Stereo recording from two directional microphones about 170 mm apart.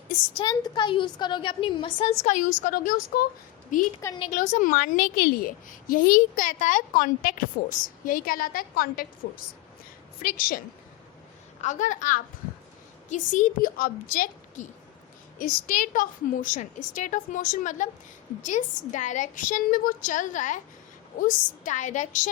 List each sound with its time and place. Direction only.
0.3 s a woman's voice: 25° left (ahead or behind)
2.2 s a woman's voice: 50° left (ahead or behind)
11.6 s a woman's voice: 45° left (ahead or behind)